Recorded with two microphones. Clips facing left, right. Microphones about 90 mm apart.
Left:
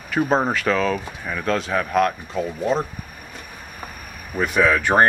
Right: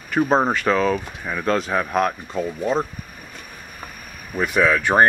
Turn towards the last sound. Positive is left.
turn(degrees=0)  # may be behind; listen again after turning